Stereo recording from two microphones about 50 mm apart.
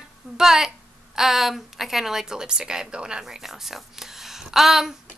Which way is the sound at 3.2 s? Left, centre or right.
Centre.